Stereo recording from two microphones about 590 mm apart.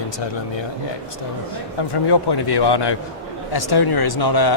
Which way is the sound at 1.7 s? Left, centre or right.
Left.